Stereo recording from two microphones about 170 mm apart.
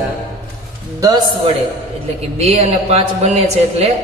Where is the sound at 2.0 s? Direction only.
35° right (ahead or behind).